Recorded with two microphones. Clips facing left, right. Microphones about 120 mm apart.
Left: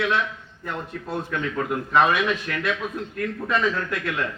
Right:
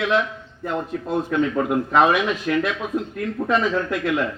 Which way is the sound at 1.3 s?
25° right (ahead or behind).